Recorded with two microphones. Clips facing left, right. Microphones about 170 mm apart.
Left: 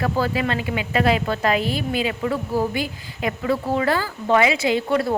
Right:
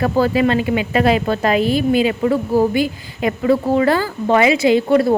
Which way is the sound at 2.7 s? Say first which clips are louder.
Right 8 dB; 20° right (ahead or behind).